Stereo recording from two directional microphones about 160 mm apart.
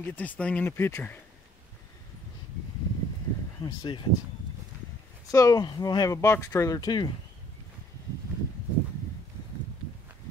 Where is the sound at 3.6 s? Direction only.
30° left (ahead or behind).